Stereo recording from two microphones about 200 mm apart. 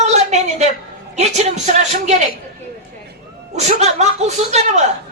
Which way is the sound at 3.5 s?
35° right (ahead or behind).